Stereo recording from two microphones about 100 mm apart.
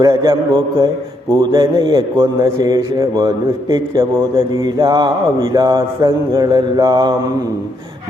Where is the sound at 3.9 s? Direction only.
60° right (ahead or behind).